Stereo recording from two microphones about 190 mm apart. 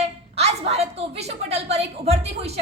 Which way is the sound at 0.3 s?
35° right (ahead or behind).